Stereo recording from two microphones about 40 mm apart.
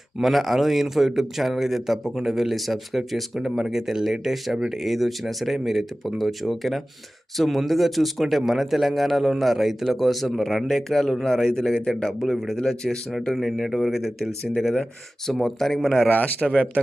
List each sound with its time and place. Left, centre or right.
0.2 s a man's voice: centre
11.7 s a man's voice: left
12.2 s speech: centre
15.5 s a man's voice: centre
16.0 s a man's voice: left
16.4 s speech: left